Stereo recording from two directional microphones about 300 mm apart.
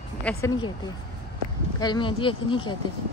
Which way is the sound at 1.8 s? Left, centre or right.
Centre.